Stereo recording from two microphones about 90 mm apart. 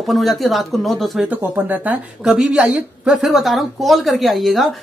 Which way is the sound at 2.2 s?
5° right (ahead or behind).